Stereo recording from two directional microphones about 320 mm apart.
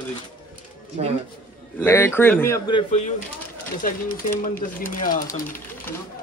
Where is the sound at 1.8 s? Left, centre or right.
Centre; by 5.2 s left.